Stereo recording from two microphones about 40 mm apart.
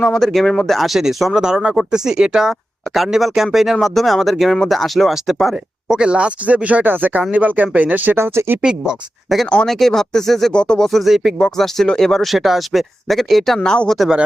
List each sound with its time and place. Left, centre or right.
0.0 s speech: centre
2.9 s speech: centre
5.9 s speech: right
6.8 s speech: right
8.1 s speech: right
9.3 s speech: centre
9.6 s speech: centre
10.5 s speech: left
10.8 s speech: centre
11.3 s speech: centre
13.6 s speech: left